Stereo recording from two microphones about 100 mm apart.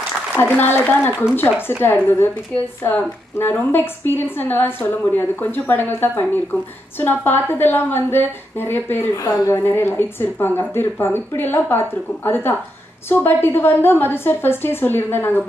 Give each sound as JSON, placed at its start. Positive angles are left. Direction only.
{"t": 0.3, "sound": "a woman's voice", "side_deg": 20}
{"t": 13.1, "sound": "a woman's voice", "side_deg": 20}